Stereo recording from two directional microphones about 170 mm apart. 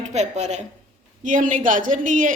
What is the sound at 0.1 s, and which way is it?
Speech, 40° right (ahead or behind).